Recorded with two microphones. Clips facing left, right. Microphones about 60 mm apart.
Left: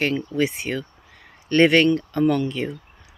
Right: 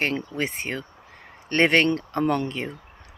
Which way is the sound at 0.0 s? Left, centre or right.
Right.